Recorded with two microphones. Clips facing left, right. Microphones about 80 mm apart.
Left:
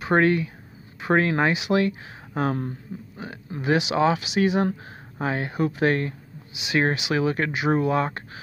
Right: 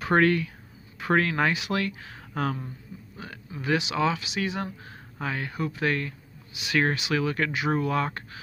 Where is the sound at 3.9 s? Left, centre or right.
Left.